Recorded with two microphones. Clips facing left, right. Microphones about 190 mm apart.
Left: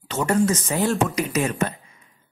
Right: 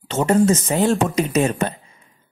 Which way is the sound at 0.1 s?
25° right (ahead or behind).